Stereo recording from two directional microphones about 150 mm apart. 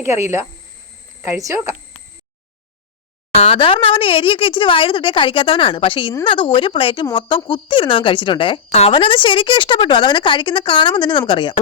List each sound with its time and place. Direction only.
0.0 s speech: 20° right (ahead or behind)
3.3 s speech: 40° left (ahead or behind)